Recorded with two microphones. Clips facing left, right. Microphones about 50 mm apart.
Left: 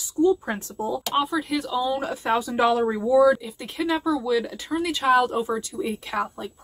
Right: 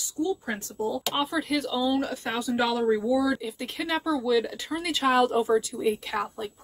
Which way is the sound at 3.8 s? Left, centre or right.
Centre.